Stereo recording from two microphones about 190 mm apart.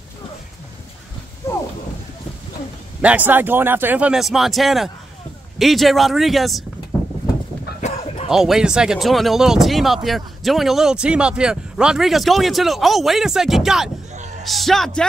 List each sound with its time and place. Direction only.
1.4 s a sound: 15° left (ahead or behind)
3.0 s speech: 10° right (ahead or behind)
8.3 s a man's voice: 5° right (ahead or behind)